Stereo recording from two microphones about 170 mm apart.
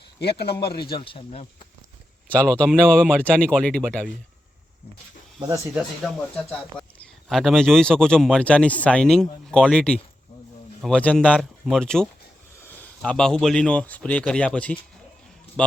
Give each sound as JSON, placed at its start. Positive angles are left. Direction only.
{"t": 0.2, "sound": "speech", "side_deg": 75}
{"t": 0.9, "sound": "speech", "side_deg": 30}
{"t": 2.3, "sound": "a man's voice", "side_deg": 5}
{"t": 5.7, "sound": "a man's voice", "side_deg": 0}